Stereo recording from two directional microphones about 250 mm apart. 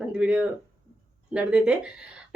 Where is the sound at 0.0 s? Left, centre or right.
Centre.